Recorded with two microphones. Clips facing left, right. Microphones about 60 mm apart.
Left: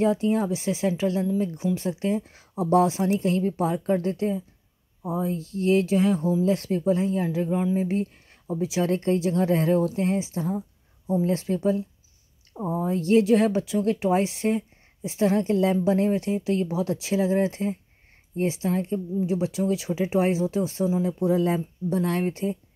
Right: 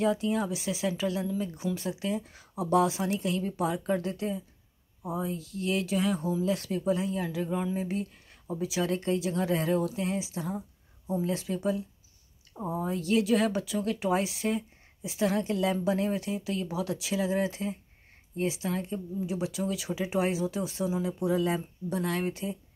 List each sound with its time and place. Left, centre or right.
0.0 s speech: left
12.5 s a woman's voice: left
12.9 s speech: left